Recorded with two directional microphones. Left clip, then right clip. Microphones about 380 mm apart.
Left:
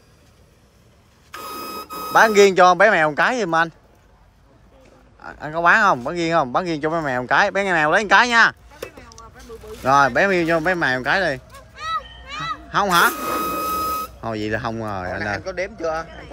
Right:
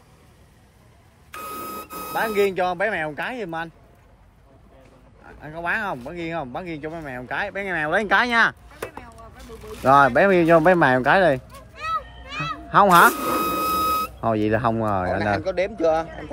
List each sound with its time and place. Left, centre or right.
1.3 s speech: centre
5.2 s speech: centre
12.3 s telephone bell ringing: centre
15.3 s speech: right